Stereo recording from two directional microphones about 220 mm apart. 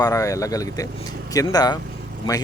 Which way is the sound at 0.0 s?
15° left (ahead or behind).